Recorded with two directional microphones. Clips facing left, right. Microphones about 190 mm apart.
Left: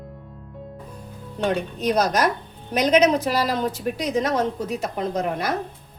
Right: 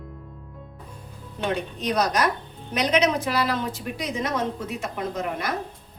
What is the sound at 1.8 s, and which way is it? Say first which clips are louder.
A woman's voice: left 3 dB; 40° left (ahead or behind).